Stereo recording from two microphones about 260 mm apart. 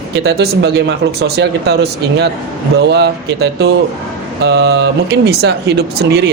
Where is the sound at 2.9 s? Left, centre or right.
Right.